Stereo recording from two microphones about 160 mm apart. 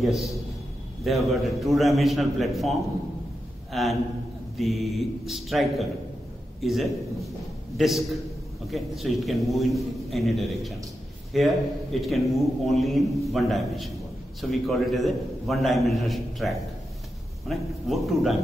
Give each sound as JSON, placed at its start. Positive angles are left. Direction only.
{"t": 0.0, "sound": "a man's voice", "side_deg": 0}